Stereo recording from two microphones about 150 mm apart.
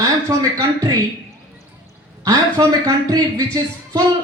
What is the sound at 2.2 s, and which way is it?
Speech, 25° right (ahead or behind).